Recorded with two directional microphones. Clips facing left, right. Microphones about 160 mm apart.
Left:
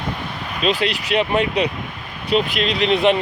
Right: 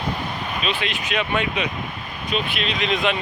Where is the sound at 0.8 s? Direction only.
35° left (ahead or behind).